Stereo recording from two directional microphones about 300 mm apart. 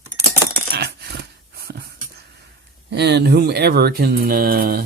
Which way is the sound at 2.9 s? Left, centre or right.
Right.